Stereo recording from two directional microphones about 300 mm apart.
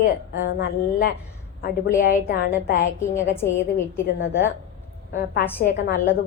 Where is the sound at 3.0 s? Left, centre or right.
Centre.